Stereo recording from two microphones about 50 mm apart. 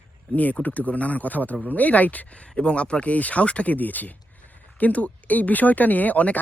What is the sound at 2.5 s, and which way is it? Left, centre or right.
Speech, left.